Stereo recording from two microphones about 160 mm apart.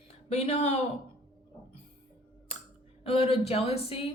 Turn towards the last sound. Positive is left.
turn(degrees=40)  # may be behind; listen again after turning